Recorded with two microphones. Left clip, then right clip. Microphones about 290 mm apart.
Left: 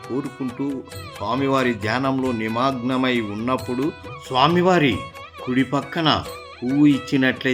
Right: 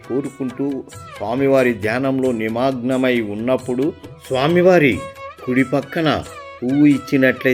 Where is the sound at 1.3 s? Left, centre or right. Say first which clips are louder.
Right 5 dB; centre.